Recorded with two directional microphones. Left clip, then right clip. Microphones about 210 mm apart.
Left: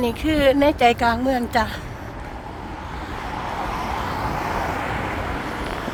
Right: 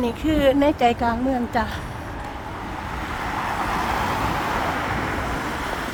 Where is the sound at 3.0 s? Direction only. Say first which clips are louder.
Right 3 dB; 50° right (ahead or behind).